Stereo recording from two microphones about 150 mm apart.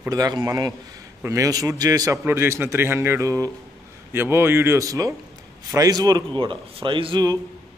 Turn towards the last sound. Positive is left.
turn(degrees=-30)  # may be behind; listen again after turning